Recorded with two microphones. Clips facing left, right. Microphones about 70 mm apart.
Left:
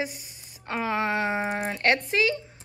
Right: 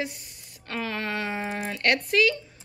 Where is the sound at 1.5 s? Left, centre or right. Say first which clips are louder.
Left 1 dB; left.